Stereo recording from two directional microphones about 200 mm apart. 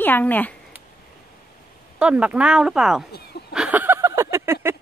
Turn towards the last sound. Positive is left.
turn(degrees=-15)  # may be behind; listen again after turning